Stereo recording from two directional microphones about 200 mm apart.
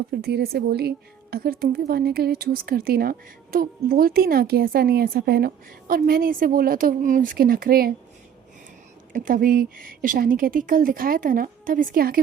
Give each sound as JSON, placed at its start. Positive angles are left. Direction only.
{"t": 0.2, "sound": "a woman's voice", "side_deg": -55}
{"t": 9.1, "sound": "a woman's voice", "side_deg": -45}